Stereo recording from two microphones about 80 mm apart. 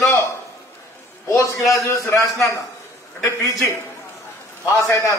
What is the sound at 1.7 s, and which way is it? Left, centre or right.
Speech, left.